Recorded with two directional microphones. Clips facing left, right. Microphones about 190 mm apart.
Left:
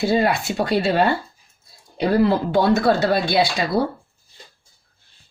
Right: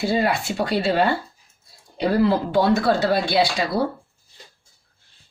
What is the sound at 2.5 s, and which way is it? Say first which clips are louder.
Speech: left 1 dB; 50° left (ahead or behind).